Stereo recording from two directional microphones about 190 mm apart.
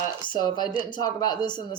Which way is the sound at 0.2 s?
25° left (ahead or behind).